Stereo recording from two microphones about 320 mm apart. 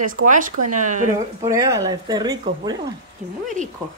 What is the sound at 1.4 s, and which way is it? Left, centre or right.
Speech, centre.